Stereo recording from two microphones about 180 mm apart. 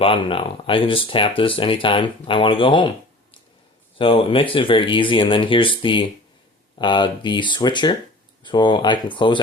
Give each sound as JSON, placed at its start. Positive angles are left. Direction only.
{"t": 0.0, "sound": "speech", "side_deg": 30}
{"t": 3.9, "sound": "speech", "side_deg": 30}